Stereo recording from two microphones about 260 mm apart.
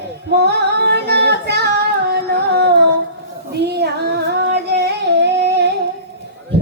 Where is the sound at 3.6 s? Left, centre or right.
Right.